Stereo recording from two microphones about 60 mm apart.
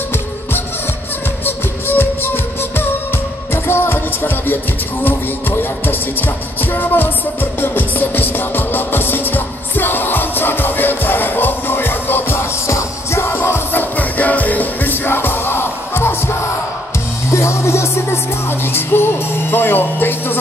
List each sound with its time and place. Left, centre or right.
1.4 s music: left
12.6 s music: left
13.7 s music: left
17.3 s music: left
18.7 s music: left